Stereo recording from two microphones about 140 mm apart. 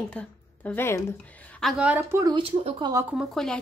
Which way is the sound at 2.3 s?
40° right (ahead or behind).